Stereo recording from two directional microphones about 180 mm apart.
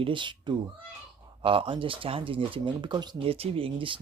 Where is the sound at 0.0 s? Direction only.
25° right (ahead or behind).